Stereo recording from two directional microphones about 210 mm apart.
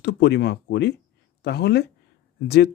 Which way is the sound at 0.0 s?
55° left (ahead or behind).